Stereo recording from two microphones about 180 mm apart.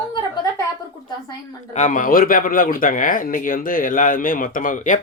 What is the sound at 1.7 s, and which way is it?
Speech, 45° left (ahead or behind).